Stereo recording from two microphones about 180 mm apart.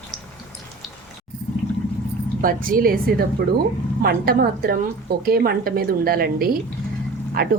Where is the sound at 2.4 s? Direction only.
50° right (ahead or behind).